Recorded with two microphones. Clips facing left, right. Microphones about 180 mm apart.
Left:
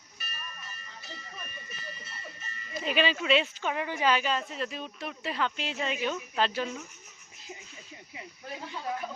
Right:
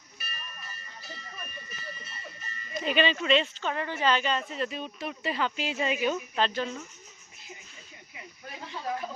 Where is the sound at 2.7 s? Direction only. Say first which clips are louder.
Right 2 dB; centre (ahead or behind).